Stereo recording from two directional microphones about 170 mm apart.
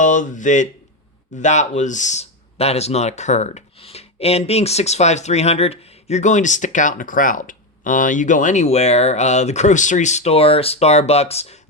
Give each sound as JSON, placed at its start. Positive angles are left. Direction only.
{"t": 0.0, "sound": "speech", "side_deg": 45}